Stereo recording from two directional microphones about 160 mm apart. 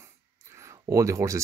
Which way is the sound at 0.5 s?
20° right (ahead or behind).